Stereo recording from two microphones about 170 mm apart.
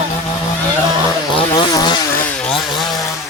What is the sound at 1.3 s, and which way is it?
Vehicle, 25° left (ahead or behind).